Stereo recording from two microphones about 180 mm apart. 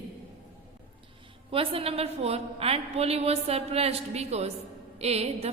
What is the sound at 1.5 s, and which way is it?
A woman's voice, 30° right (ahead or behind).